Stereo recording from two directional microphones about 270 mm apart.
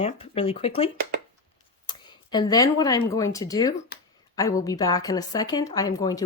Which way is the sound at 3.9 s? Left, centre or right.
Left.